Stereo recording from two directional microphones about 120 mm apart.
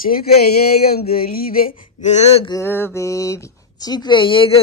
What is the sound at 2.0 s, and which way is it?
Speech, 70° left (ahead or behind).